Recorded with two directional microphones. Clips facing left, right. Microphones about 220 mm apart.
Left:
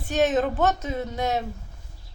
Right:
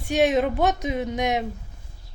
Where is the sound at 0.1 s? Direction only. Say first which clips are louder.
Right 2 dB; 10° right (ahead or behind).